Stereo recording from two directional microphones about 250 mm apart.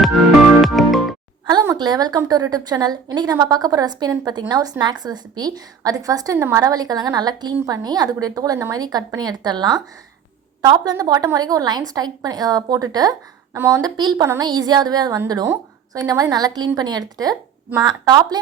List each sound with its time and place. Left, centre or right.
0.0 s music: centre
1.5 s a woman's voice: centre